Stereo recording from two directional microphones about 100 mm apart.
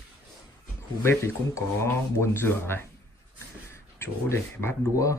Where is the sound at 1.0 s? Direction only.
30° left (ahead or behind).